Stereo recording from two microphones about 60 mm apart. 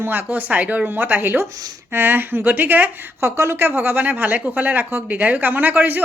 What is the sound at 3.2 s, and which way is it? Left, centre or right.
Speech, right.